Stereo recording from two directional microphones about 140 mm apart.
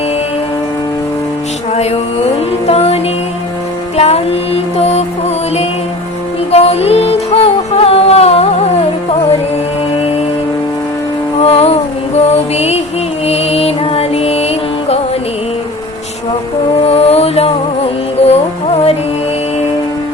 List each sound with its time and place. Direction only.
1.7 s music: 50° left (ahead or behind)
6.5 s music: 45° left (ahead or behind)
11.3 s music: 45° left (ahead or behind)
16.8 s music: 45° left (ahead or behind)